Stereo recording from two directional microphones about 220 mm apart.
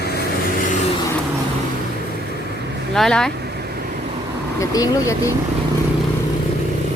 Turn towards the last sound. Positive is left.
turn(degrees=15)  # may be behind; listen again after turning